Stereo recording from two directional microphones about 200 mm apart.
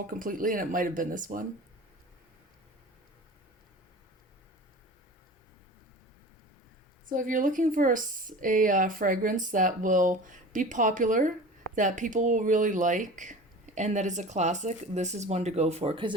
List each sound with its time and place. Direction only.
0.1 s speech: 45° right (ahead or behind)
7.1 s speech: 40° right (ahead or behind); by 16.1 s 25° right (ahead or behind)